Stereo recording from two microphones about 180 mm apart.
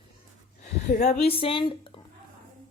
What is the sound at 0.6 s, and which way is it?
A woman's voice, 40° left (ahead or behind).